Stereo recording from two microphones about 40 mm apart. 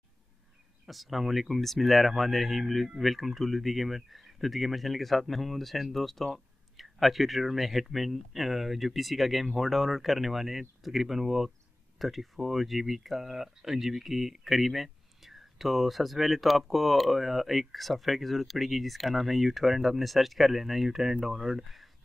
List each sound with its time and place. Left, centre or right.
0.8 s speech: centre